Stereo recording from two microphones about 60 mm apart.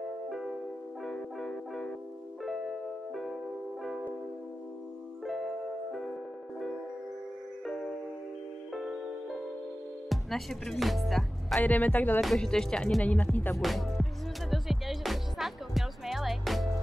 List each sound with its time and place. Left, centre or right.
0.3 s music: centre
1.0 s music: centre
2.4 s music: centre
5.2 s music: centre
8.7 s music: centre
10.0 s music: centre
11.6 s speech: left
12.4 s speech: centre
13.0 s speech: left
13.6 s music: centre